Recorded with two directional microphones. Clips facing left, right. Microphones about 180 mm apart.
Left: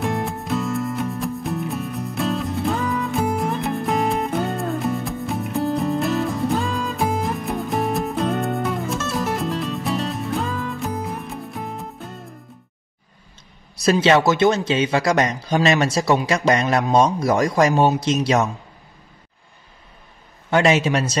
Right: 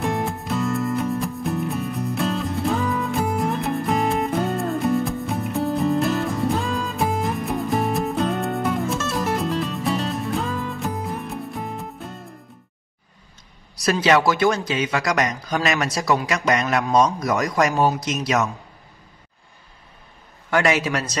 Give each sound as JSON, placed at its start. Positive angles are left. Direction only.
{"t": 0.0, "sound": "music", "side_deg": 0}
{"t": 13.7, "sound": "speech", "side_deg": 25}
{"t": 20.4, "sound": "speech", "side_deg": 25}